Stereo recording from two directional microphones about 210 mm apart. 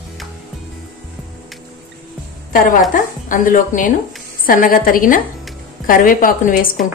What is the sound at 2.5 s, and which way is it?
A woman's voice, 40° left (ahead or behind).